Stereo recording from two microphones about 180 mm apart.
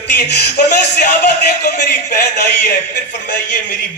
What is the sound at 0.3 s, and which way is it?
Music, 70° left (ahead or behind).